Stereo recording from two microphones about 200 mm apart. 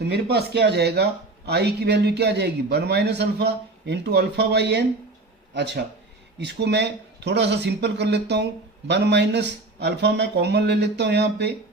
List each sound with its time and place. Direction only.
0.0 s a man's voice: 55° right (ahead or behind)
6.4 s a man's voice: 55° right (ahead or behind)